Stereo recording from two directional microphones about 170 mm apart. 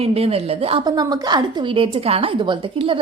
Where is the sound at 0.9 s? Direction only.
25° right (ahead or behind).